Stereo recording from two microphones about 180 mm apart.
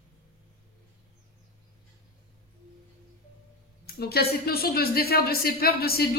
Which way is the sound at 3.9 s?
60° left (ahead or behind).